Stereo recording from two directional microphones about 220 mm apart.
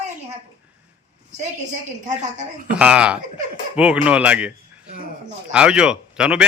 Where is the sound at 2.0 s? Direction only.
35° right (ahead or behind).